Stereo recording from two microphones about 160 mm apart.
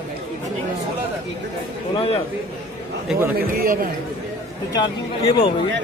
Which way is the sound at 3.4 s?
65° right (ahead or behind).